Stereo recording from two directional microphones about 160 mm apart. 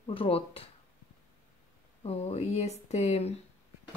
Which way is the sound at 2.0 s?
40° left (ahead or behind).